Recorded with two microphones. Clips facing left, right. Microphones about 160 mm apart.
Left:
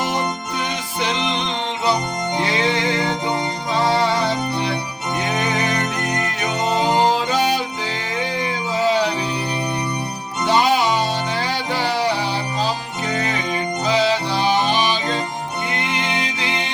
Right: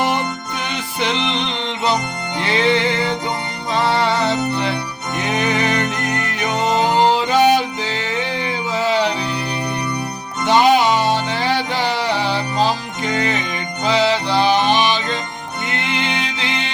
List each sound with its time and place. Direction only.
1.0 s music: 70° right (ahead or behind)
4.0 s music: 75° right (ahead or behind)
8.7 s music: 70° right (ahead or behind)
10.4 s music: 70° right (ahead or behind)